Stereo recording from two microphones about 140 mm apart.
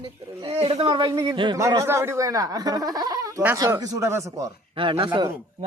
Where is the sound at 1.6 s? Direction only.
20° right (ahead or behind).